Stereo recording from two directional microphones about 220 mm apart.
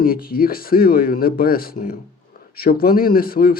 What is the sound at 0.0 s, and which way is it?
Speech, 45° left (ahead or behind).